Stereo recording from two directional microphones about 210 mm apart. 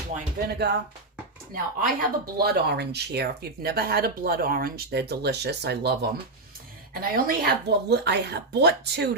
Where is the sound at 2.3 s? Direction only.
50° right (ahead or behind).